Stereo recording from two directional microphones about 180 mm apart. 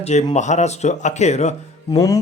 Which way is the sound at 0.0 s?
40° left (ahead or behind).